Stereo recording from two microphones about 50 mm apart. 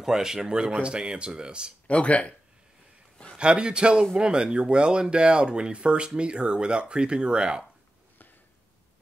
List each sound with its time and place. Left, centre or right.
0.0 s speech: centre
1.9 s speech: left
3.3 s speech: centre